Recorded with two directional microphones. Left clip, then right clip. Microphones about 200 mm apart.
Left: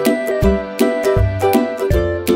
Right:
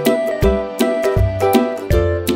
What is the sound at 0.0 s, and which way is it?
Music, centre (ahead or behind).